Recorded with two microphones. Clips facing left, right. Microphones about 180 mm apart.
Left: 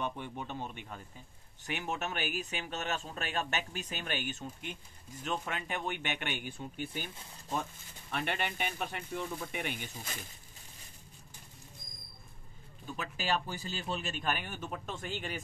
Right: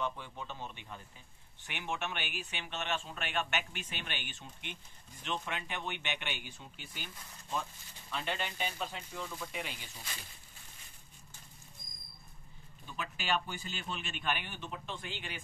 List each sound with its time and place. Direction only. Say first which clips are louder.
0.0 s speech: left 1 dB; 55° left (ahead or behind)
1.6 s speech: left 3 dB; 40° left (ahead or behind)
8.1 s speech: left 3 dB; 60° left (ahead or behind)
12.8 s speech: left 2 dB; 40° left (ahead or behind)